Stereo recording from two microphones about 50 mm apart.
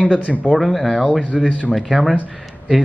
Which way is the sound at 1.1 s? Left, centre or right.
Centre.